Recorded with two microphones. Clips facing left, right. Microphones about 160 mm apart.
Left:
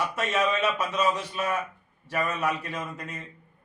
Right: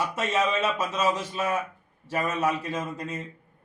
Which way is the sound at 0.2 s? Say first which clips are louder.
Even; 25° right (ahead or behind).